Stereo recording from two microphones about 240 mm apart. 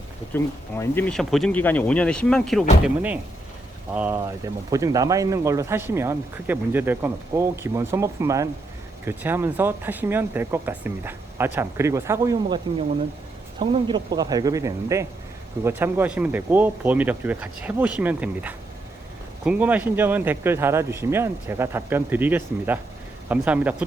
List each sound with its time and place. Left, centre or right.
0.3 s speech: centre
13.6 s speech: centre